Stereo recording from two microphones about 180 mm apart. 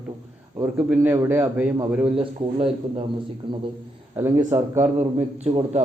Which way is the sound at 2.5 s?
30° right (ahead or behind).